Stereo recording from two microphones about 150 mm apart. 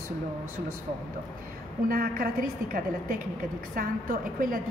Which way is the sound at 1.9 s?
75° right (ahead or behind).